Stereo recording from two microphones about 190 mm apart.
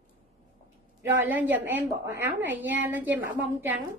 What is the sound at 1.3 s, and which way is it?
A woman's voice, 10° right (ahead or behind).